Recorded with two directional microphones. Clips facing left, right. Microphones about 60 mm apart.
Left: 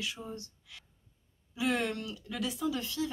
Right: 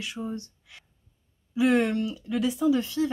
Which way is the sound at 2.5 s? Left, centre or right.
Right.